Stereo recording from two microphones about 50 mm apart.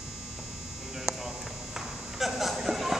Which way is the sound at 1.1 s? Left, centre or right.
Centre.